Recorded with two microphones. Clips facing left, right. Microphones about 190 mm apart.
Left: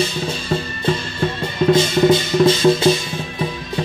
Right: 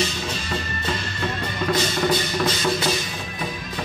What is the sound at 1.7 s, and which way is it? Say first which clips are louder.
Music: left 8 dB; 25° left (ahead or behind).